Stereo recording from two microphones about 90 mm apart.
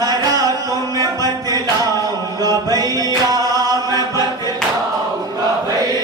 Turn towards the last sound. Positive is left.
turn(degrees=-45)  # may be behind; listen again after turning